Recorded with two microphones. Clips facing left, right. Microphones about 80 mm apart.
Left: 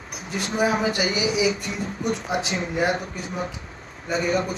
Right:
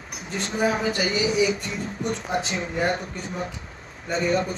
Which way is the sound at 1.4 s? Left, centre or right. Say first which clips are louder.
Even; centre.